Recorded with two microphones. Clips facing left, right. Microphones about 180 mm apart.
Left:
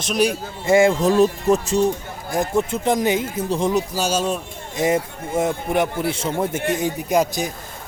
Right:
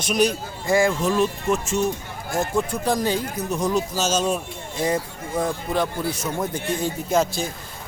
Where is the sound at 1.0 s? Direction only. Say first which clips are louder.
Left 5 dB; 40° left (ahead or behind).